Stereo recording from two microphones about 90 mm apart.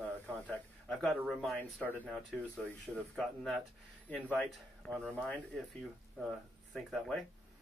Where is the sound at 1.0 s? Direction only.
Centre (ahead or behind).